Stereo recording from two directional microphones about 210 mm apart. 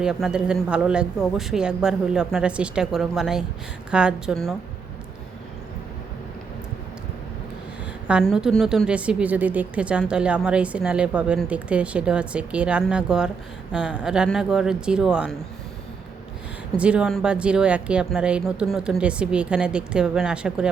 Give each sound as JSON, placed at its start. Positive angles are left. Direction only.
{"t": 0.0, "sound": "a woman's voice", "side_deg": -5}
{"t": 8.0, "sound": "a woman's voice", "side_deg": 0}
{"t": 16.7, "sound": "a woman's voice", "side_deg": -5}